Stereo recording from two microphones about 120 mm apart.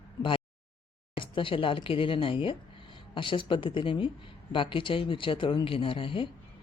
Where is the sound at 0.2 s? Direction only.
45° left (ahead or behind).